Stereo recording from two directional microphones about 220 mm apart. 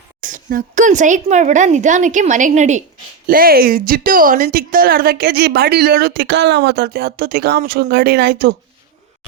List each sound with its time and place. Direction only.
0.2 s a woman's voice: 35° right (ahead or behind)